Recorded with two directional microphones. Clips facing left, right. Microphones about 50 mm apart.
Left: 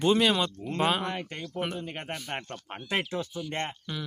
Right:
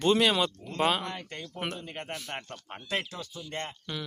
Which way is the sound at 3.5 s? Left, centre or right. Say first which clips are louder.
Even; left.